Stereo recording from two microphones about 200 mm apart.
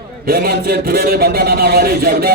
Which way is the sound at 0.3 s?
50° right (ahead or behind).